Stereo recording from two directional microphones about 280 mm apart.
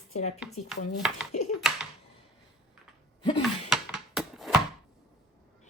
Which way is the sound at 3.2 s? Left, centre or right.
Centre.